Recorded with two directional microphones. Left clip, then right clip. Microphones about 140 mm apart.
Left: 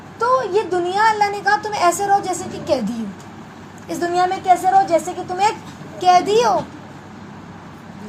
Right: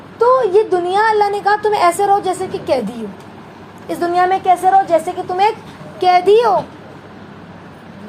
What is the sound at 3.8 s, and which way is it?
A woman's voice, 30° right (ahead or behind).